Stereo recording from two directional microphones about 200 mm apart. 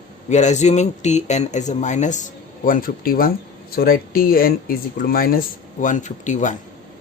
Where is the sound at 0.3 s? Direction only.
35° left (ahead or behind).